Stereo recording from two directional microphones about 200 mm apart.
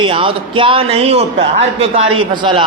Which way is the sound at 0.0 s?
25° right (ahead or behind).